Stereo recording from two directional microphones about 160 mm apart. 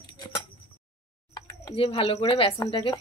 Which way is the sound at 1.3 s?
30° left (ahead or behind).